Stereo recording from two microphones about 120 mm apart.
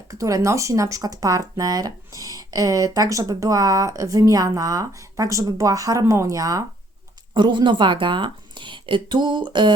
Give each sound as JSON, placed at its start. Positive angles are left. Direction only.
{"t": 0.1, "sound": "speech", "side_deg": -25}
{"t": 7.3, "sound": "speech", "side_deg": -40}